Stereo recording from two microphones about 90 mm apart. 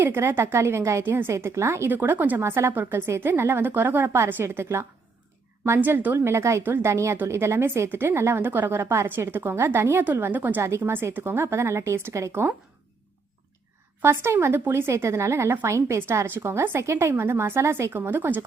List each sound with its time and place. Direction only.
0.0 s a woman's voice: 25° right (ahead or behind)
1.9 s a woman's voice: 20° right (ahead or behind)
6.1 s a woman's voice: 30° right (ahead or behind)
10.6 s a woman's voice: 30° right (ahead or behind)
12.3 s a woman's voice: 20° right (ahead or behind)
14.0 s a woman's voice: 25° right (ahead or behind)